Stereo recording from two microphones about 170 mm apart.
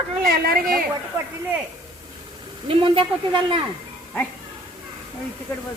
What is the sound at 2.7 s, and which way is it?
Speech, 30° right (ahead or behind).